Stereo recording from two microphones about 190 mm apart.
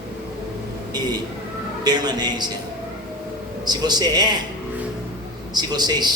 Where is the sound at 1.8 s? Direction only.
20° right (ahead or behind).